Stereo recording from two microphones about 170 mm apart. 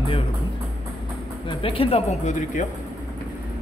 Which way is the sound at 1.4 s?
30° left (ahead or behind).